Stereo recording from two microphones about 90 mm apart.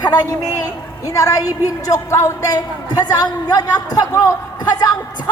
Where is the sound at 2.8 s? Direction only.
50° left (ahead or behind).